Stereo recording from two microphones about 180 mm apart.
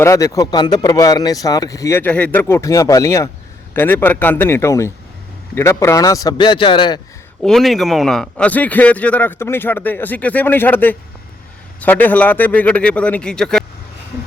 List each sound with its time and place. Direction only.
0.0 s speech: 15° left (ahead or behind)
7.4 s speech: centre (ahead or behind)